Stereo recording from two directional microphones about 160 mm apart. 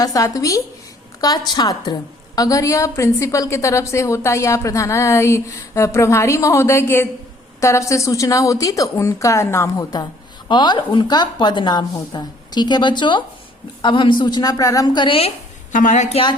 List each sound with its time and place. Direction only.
0.0 s a woman's voice: 20° left (ahead or behind)
15.7 s a woman's voice: 55° left (ahead or behind)